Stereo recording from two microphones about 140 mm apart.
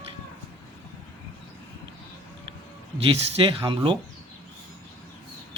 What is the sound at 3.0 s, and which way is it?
Speech, 40° right (ahead or behind).